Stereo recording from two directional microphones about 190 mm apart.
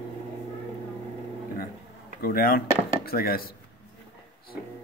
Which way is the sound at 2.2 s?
50° left (ahead or behind).